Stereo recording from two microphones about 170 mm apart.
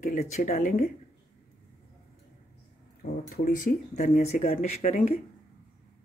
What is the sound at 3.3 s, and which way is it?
Speech, 55° left (ahead or behind).